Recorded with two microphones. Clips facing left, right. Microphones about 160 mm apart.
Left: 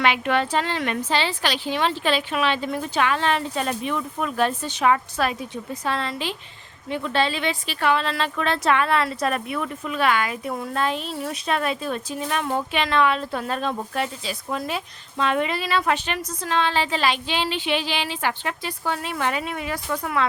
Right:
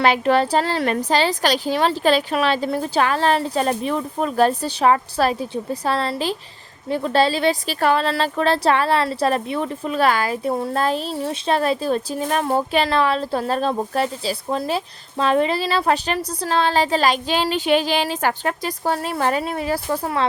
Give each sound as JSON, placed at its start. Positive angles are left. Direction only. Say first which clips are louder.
{"t": 0.0, "sound": "speech", "louder": "right 5 dB", "side_deg": -35}